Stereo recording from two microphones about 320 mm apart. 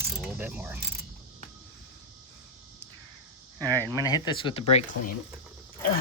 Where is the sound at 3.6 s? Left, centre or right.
Centre.